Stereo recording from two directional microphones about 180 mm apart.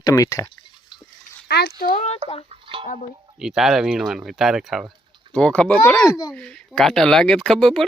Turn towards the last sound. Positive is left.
turn(degrees=0)  # may be behind; listen again after turning